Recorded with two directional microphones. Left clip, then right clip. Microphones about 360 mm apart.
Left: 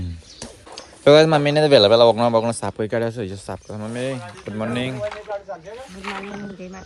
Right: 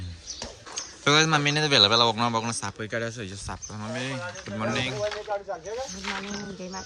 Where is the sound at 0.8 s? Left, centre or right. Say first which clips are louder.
Left 9 dB; centre.